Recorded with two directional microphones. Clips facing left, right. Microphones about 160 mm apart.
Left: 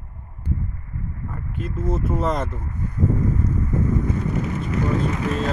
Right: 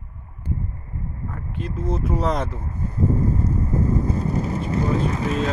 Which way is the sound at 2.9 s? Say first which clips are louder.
Right 1 dB; 30° right (ahead or behind).